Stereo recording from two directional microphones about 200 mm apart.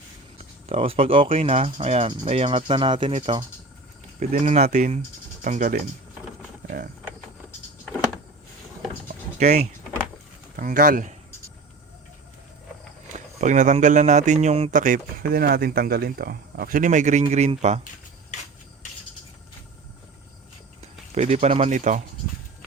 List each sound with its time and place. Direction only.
0.7 s speech: 30° right (ahead or behind)
4.2 s speech: 35° right (ahead or behind)
9.0 s mechanisms: 35° right (ahead or behind)
10.6 s speech: 40° right (ahead or behind)
13.1 s speech: 35° right (ahead or behind)
20.8 s speech: 35° right (ahead or behind)